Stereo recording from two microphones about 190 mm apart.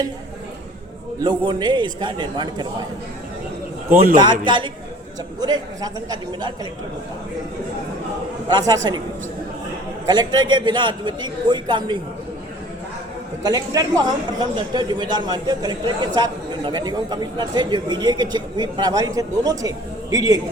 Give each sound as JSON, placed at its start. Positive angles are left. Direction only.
{"t": 1.2, "sound": "a man's voice", "side_deg": -25}
{"t": 4.2, "sound": "a man's voice", "side_deg": -25}
{"t": 8.4, "sound": "a man's voice", "side_deg": -20}
{"t": 10.1, "sound": "a man's voice", "side_deg": -25}
{"t": 13.4, "sound": "a man's voice", "side_deg": -20}